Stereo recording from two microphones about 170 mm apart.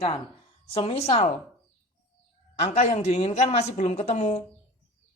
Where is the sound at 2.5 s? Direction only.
40° left (ahead or behind).